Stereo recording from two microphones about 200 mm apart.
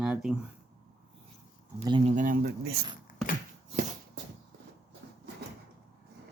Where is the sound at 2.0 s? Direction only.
40° right (ahead or behind).